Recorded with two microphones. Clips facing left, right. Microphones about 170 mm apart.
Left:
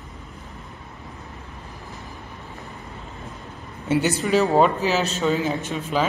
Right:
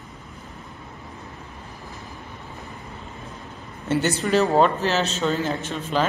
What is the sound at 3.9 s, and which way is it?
Speech, 5° left (ahead or behind).